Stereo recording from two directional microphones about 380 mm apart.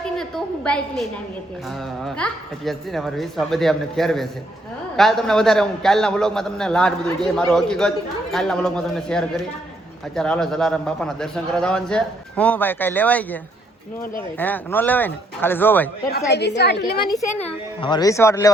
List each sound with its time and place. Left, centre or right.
0.0 s a sound: centre
2.0 s a man's voice: centre
16.3 s a woman's voice: left
17.4 s speech: centre